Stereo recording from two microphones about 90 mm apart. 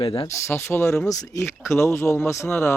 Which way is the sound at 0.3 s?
30° left (ahead or behind).